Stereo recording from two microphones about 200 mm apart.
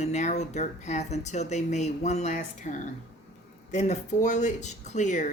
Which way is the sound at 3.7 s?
35° left (ahead or behind).